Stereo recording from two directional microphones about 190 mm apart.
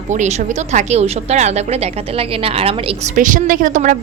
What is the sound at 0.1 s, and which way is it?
Speech, 40° right (ahead or behind).